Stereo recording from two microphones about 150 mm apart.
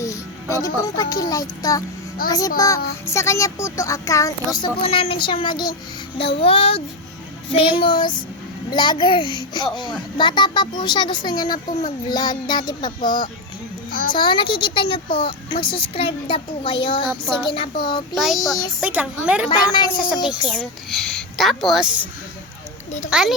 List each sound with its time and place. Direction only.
0.0 s speech: 20° left (ahead or behind)
2.2 s a child's voice: 75° left (ahead or behind)
2.6 s a child's voice: 20° left (ahead or behind)
4.8 s a child's voice: 40° left (ahead or behind)
11.5 s a child's voice: 55° left (ahead or behind)
12.0 s a child's voice: 25° left (ahead or behind)
13.0 s a child's voice: 65° left (ahead or behind)
14.2 s a child's voice: 30° left (ahead or behind)
18.1 s a woman's voice: centre (ahead or behind)
18.3 s a child's voice: 25° left (ahead or behind)
18.8 s a woman's voice: 10° right (ahead or behind)
19.5 s a child's voice: 30° left (ahead or behind)
20.5 s a woman's voice: 5° left (ahead or behind)
23.0 s a woman's voice: 5° right (ahead or behind)